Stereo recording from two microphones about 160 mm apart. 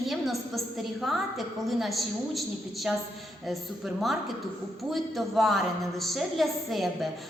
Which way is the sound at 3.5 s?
Centre (ahead or behind).